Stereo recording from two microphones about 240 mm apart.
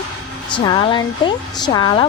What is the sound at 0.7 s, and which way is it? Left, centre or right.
A woman's voice, centre.